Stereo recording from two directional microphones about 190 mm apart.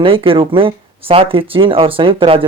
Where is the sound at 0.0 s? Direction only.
30° right (ahead or behind).